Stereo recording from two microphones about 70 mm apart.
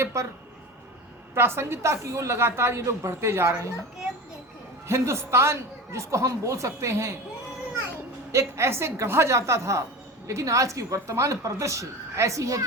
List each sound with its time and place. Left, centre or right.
0.0 s speech: right
1.4 s a woman's voice: right
4.9 s speech: right
8.3 s a woman's voice: right